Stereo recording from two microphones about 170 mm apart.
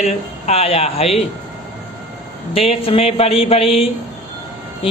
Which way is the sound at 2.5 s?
35° left (ahead or behind).